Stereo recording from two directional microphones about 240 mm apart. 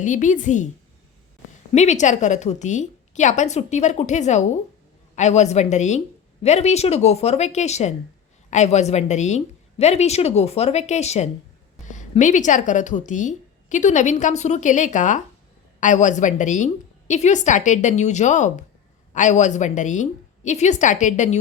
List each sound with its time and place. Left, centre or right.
0.0 s a woman's voice: left
1.7 s a woman's voice: left